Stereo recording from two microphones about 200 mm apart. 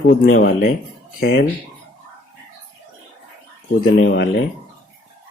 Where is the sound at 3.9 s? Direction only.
55° left (ahead or behind).